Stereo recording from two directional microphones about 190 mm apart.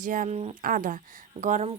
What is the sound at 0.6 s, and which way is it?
Speech, 45° right (ahead or behind).